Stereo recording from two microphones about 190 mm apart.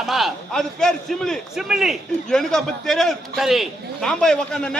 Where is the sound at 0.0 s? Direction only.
Centre (ahead or behind).